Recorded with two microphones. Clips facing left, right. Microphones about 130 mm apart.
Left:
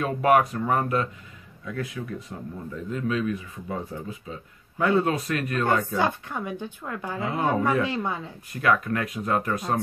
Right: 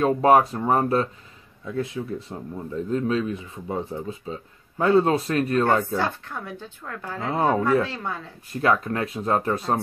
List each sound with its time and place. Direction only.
0.0 s speech: 30° right (ahead or behind)
5.9 s speech: 15° left (ahead or behind)
8.5 s speech: 30° right (ahead or behind)